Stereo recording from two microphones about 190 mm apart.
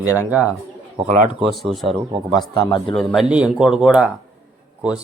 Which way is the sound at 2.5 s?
20° left (ahead or behind).